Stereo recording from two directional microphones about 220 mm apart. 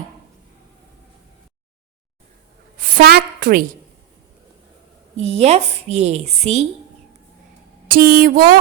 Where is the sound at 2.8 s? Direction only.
45° right (ahead or behind).